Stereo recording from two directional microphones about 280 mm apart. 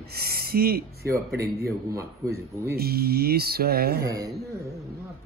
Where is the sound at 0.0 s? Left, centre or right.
Right.